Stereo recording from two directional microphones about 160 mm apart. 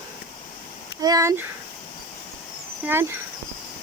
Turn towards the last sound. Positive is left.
turn(degrees=-15)  # may be behind; listen again after turning